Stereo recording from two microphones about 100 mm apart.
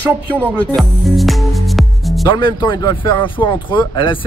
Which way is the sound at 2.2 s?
50° left (ahead or behind).